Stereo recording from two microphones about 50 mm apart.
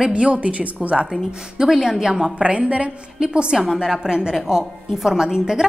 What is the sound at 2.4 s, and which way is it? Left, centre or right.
A woman's voice, right.